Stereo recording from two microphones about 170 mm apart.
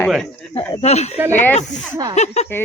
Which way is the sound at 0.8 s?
40° left (ahead or behind).